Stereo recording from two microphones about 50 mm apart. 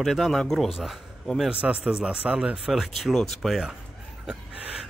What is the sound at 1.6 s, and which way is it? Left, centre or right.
Speech, right.